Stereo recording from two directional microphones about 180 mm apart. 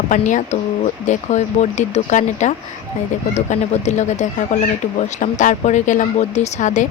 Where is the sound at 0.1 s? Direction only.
45° left (ahead or behind).